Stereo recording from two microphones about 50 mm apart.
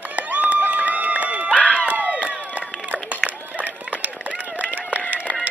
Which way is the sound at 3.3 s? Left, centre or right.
Right.